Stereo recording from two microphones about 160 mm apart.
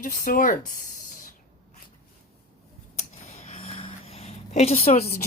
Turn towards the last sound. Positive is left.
turn(degrees=40)  # may be behind; listen again after turning